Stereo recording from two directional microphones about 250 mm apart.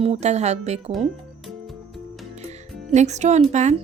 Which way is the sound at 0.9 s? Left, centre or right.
Centre.